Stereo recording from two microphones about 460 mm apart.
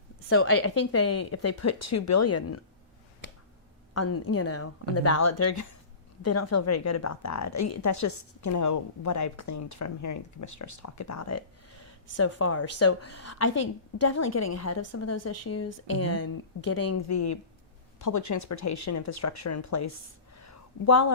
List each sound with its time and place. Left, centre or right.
0.3 s speech: left
3.9 s speech: left
20.3 s a sound: left